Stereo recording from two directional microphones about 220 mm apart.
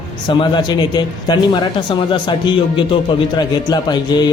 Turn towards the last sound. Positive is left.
turn(degrees=20)  # may be behind; listen again after turning